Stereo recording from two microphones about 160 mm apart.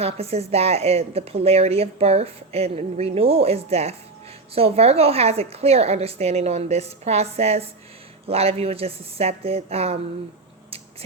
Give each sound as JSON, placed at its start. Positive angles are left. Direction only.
{"t": 0.0, "sound": "a woman's voice", "side_deg": -40}